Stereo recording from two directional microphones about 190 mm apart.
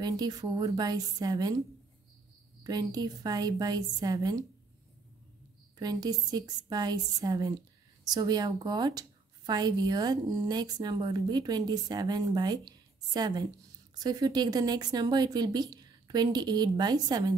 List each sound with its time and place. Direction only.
0.0 s a woman's voice: 20° right (ahead or behind)
2.6 s a woman's voice: 20° right (ahead or behind)
5.8 s a woman's voice: 20° right (ahead or behind)